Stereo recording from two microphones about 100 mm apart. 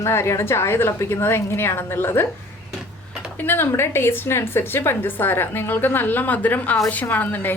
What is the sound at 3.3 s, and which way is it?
A woman's voice, 20° left (ahead or behind).